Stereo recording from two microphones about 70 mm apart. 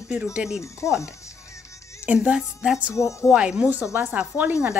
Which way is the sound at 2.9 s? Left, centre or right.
Left.